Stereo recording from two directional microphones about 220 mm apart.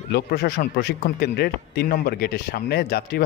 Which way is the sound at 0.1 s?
45° left (ahead or behind).